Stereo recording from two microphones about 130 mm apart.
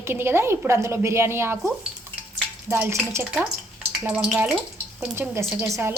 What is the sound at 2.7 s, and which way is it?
Speech, 20° right (ahead or behind).